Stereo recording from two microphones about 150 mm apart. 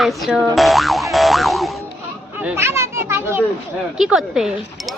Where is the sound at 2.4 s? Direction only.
15° right (ahead or behind).